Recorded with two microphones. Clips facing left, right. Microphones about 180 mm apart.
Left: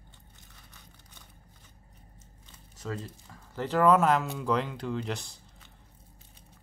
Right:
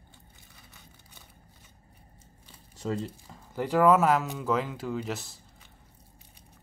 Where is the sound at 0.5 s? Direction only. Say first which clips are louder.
Right 2 dB; 5° right (ahead or behind).